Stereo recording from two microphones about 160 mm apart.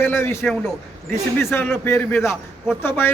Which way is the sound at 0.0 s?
15° left (ahead or behind).